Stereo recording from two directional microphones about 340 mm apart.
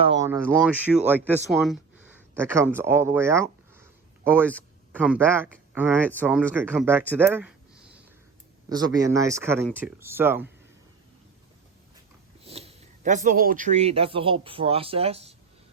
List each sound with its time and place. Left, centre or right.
0.0 s speech: centre
8.7 s speech: centre
12.4 s speech: centre